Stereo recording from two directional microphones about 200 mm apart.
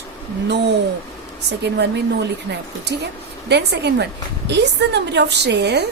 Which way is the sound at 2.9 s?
55° right (ahead or behind).